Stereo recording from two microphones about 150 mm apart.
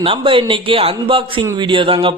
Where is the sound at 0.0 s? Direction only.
35° right (ahead or behind).